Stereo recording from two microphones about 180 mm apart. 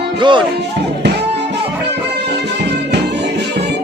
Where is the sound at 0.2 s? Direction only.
25° right (ahead or behind).